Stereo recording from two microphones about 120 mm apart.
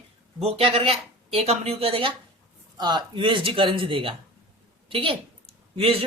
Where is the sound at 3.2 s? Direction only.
45° right (ahead or behind).